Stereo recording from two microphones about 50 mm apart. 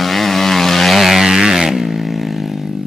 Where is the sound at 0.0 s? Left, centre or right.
Centre.